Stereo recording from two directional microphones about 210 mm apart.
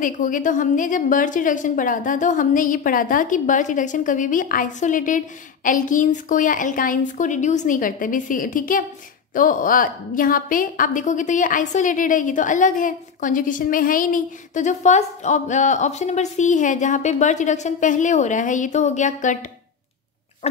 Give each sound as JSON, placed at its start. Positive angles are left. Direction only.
{"t": 0.0, "sound": "a woman's voice", "side_deg": 40}